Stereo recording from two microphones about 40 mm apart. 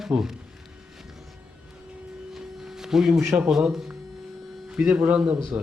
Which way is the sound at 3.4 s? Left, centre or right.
Centre.